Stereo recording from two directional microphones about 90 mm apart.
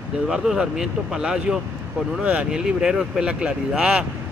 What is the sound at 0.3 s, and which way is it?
Speech, 5° right (ahead or behind).